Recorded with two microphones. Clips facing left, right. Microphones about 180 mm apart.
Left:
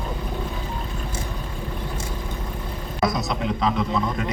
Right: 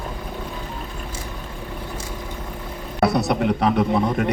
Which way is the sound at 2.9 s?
65° right (ahead or behind).